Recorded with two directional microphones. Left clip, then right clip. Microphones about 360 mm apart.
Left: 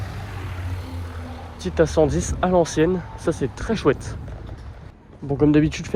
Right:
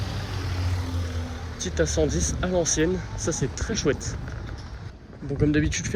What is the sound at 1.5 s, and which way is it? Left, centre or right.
Speech, centre.